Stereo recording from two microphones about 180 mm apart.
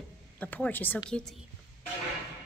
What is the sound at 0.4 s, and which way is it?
Speech, 10° left (ahead or behind).